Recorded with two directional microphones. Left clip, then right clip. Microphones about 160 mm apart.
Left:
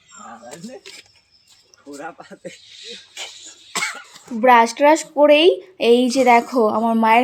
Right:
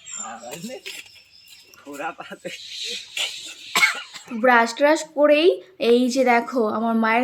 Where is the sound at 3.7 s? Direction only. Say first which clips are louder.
Right 6 dB; 25° left (ahead or behind).